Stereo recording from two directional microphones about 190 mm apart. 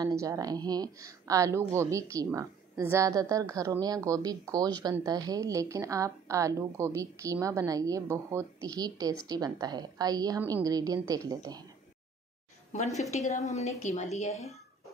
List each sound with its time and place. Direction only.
0.0 s a woman's voice: 15° right (ahead or behind)
12.7 s a woman's voice: 35° left (ahead or behind)